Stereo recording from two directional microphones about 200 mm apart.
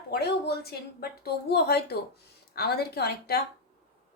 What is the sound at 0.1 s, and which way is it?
Speech, 55° left (ahead or behind).